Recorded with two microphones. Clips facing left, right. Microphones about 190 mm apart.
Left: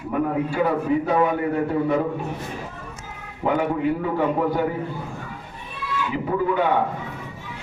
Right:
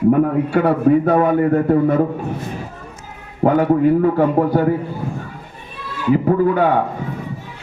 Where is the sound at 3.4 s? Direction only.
45° right (ahead or behind).